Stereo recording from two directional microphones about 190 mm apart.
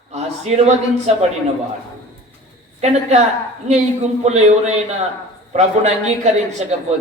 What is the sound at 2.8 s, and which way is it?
A man's voice, 35° right (ahead or behind).